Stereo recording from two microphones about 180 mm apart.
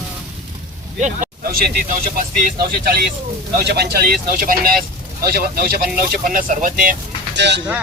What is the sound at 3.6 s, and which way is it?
Speech, 65° right (ahead or behind).